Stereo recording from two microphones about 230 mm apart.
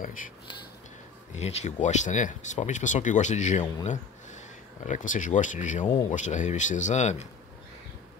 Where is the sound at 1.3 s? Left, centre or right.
Left.